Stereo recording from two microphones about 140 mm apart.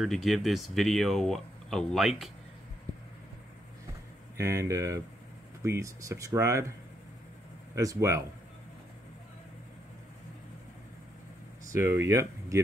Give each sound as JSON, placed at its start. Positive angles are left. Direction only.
{"t": 0.0, "sound": "speech", "side_deg": 0}
{"t": 4.4, "sound": "speech", "side_deg": -20}
{"t": 7.7, "sound": "speech", "side_deg": -25}
{"t": 11.8, "sound": "speech", "side_deg": -20}